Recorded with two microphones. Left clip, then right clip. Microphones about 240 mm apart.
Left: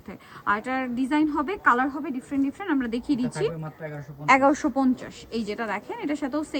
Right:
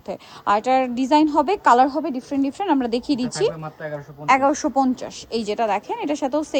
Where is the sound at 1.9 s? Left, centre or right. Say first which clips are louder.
Right 7 dB; right; by 3.5 s centre.